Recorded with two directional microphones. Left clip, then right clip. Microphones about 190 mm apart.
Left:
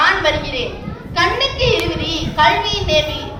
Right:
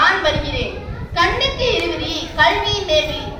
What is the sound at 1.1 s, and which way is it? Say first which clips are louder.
Child singing: left 1 dB; 45° left (ahead or behind).